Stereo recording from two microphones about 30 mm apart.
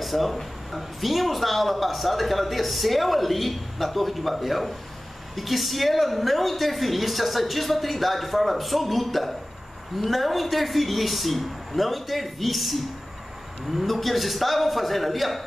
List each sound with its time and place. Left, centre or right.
0.0 s speech: centre